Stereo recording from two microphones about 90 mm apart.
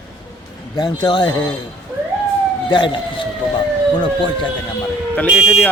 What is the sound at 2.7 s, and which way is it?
Speech, 65° left (ahead or behind).